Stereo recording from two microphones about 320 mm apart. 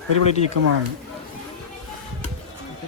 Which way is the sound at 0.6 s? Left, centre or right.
Right.